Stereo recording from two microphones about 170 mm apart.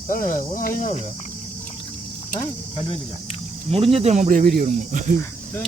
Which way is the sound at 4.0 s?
40° right (ahead or behind).